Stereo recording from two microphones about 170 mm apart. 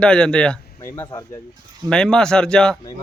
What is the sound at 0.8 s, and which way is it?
Speech, 15° left (ahead or behind).